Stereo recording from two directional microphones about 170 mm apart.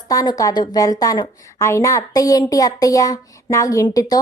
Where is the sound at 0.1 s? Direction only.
20° left (ahead or behind).